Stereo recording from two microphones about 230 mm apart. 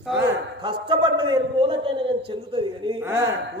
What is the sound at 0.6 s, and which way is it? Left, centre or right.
A woman's voice, right.